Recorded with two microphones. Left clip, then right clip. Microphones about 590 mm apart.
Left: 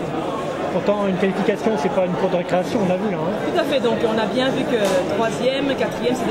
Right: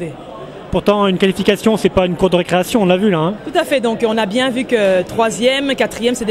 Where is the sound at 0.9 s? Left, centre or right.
Right.